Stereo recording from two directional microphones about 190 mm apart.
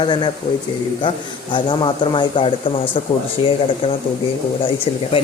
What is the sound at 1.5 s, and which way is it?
Speech, 25° left (ahead or behind).